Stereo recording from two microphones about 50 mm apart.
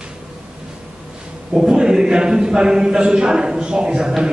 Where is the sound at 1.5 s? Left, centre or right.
Centre.